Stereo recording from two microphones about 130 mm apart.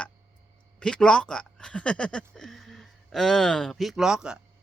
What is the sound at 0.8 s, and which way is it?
Speech, 5° left (ahead or behind).